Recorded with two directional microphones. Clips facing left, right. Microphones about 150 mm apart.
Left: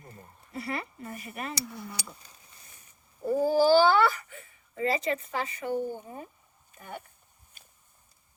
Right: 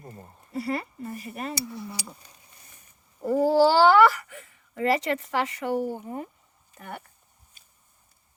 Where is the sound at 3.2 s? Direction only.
90° right; by 7.0 s 70° right (ahead or behind).